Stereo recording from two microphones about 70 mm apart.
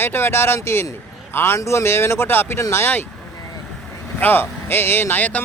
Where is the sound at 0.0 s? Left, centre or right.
Left.